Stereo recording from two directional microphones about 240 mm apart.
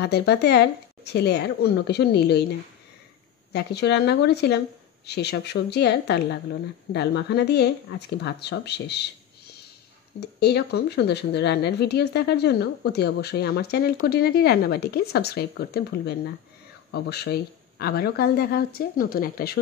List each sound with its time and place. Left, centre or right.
0.0 s speech: left
3.5 s speech: left
10.2 s speech: left